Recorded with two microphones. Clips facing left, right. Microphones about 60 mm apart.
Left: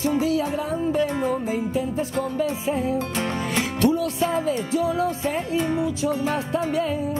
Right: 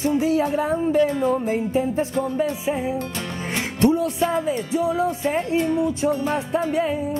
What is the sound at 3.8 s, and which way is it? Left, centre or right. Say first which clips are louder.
Music: right 3 dB; right.